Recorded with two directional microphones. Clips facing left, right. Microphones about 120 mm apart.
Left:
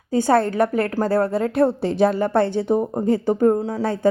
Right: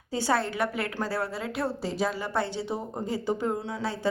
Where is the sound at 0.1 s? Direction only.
50° left (ahead or behind).